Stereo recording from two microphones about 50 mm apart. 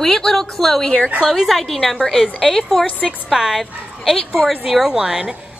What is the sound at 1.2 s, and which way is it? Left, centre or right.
A woman's voice, centre.